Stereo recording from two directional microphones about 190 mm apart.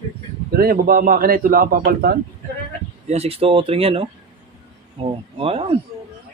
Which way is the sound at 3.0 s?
35° right (ahead or behind).